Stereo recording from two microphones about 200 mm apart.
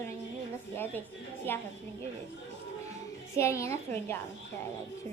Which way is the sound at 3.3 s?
15° left (ahead or behind).